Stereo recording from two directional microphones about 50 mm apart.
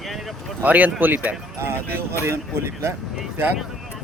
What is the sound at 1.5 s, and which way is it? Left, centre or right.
Speech, right.